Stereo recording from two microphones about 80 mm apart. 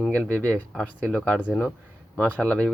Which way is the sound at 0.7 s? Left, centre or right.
Centre.